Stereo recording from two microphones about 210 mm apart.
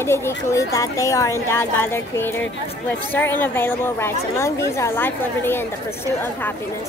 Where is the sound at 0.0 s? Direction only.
10° left (ahead or behind).